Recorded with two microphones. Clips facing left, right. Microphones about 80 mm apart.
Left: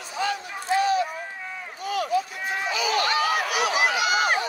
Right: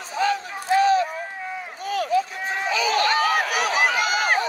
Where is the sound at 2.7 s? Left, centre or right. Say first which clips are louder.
Right 4 dB; right.